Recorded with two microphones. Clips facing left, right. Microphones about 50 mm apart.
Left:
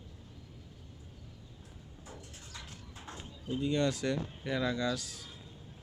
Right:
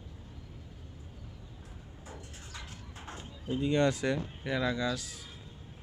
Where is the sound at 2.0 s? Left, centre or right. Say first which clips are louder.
Right 2 dB; right.